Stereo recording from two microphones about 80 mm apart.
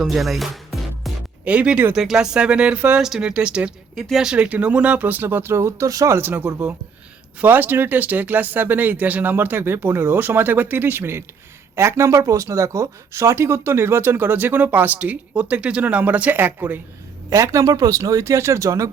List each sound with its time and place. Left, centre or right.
0.0 s music: centre
1.5 s speech: centre; by 6.1 s right
7.4 s speech: right
17.2 s speech: right